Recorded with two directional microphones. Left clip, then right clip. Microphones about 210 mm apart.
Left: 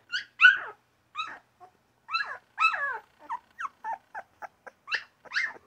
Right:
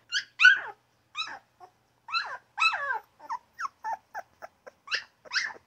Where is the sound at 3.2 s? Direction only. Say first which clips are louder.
Right 1 dB; 5° right (ahead or behind).